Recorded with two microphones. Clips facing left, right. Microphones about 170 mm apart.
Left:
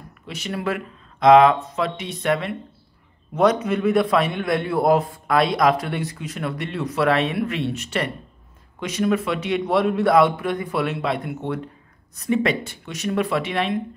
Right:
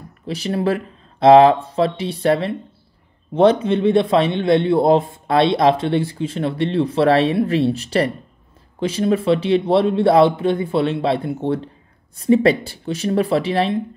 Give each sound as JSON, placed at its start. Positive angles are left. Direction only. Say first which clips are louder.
{"t": 0.3, "sound": "a man's voice", "louder": "right 6 dB", "side_deg": -30}